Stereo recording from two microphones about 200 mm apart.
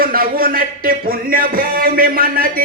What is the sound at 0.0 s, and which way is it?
Speech, 45° right (ahead or behind).